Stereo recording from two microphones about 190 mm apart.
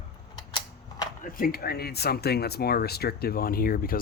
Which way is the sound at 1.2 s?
50° left (ahead or behind).